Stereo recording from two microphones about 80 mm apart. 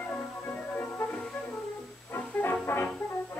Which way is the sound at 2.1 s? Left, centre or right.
Left.